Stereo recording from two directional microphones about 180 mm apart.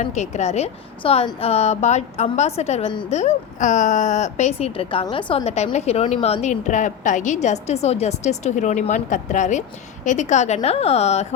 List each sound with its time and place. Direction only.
0.0 s speech: 40° left (ahead or behind)
3.1 s speech: 40° left (ahead or behind)